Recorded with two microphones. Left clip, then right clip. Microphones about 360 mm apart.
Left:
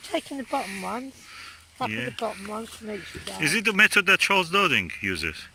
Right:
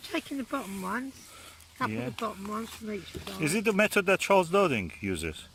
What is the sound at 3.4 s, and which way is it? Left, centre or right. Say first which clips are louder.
Speech: left 6 dB; centre.